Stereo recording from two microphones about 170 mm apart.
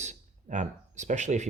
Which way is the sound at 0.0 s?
45° right (ahead or behind).